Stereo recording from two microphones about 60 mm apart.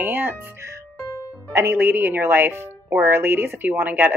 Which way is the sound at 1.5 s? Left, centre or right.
Right.